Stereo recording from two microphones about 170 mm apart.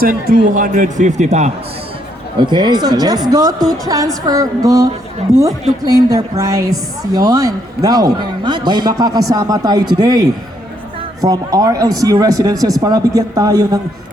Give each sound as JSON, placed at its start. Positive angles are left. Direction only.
{"t": 0.0, "sound": "a man's voice", "side_deg": -55}
{"t": 2.4, "sound": "a woman's voice", "side_deg": -25}